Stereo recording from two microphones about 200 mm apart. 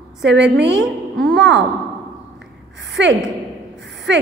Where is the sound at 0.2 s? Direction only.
60° right (ahead or behind).